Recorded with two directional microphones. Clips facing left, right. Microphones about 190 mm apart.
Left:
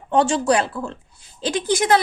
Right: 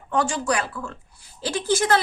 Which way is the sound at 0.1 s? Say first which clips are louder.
Left 6 dB; 25° left (ahead or behind).